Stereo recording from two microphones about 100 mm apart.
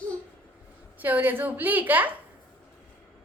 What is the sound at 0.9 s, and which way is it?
A woman's voice, 20° right (ahead or behind).